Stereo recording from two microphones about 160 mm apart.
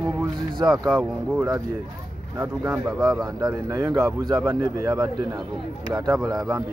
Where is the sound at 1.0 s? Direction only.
10° right (ahead or behind).